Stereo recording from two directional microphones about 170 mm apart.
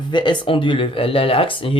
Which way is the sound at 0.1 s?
25° left (ahead or behind).